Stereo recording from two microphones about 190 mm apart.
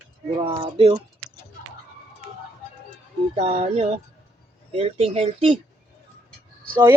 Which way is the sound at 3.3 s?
35° right (ahead or behind).